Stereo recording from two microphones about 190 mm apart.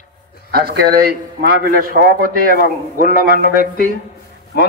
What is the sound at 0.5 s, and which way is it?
A man's voice, 55° right (ahead or behind).